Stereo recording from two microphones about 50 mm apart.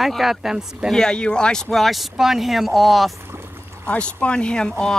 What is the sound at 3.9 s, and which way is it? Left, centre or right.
Speech, left.